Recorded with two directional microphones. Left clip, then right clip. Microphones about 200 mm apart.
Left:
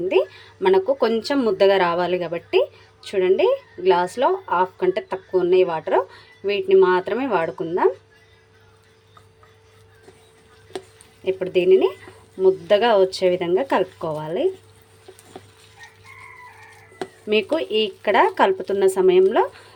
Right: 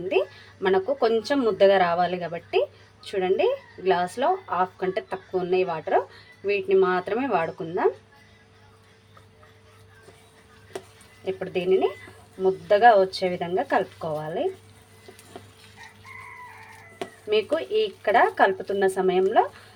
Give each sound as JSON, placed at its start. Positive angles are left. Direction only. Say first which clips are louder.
{"t": 0.1, "sound": "speech", "louder": "left 2 dB", "side_deg": 25}
{"t": 11.3, "sound": "speech", "louder": "left 7 dB", "side_deg": 35}
{"t": 17.2, "sound": "speech", "louder": "left 3 dB", "side_deg": 35}